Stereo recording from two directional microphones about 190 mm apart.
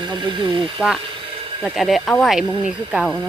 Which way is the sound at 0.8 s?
Centre (ahead or behind).